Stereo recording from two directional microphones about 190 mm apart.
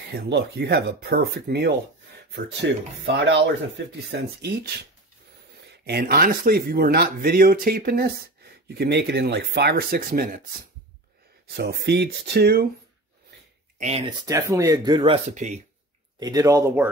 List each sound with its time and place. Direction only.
0.1 s speech: 60° right (ahead or behind)
11.5 s speech: 60° right (ahead or behind)
13.7 s speech: 35° right (ahead or behind)
14.0 s speech: 20° right (ahead or behind)
15.2 s speech: 40° right (ahead or behind)
16.2 s speech: 20° right (ahead or behind)